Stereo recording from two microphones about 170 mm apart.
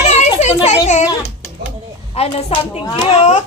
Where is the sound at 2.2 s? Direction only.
35° left (ahead or behind).